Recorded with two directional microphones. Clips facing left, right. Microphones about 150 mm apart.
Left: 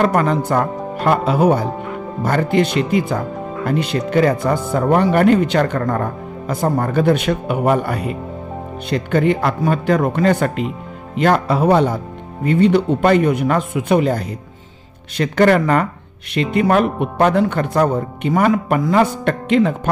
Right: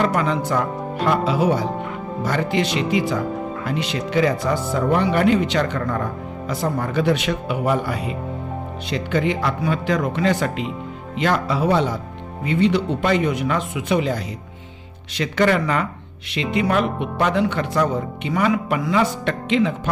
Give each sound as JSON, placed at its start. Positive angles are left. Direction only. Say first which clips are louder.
{"t": 0.0, "sound": "speech", "louder": "left 4 dB", "side_deg": 50}